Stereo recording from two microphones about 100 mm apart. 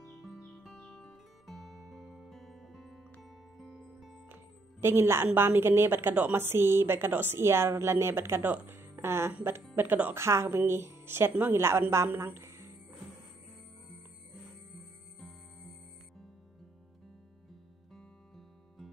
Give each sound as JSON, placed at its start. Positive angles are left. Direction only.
{"t": 0.2, "sound": "music", "side_deg": 0}
{"t": 4.3, "sound": "speech", "side_deg": -25}
{"t": 15.1, "sound": "music", "side_deg": 0}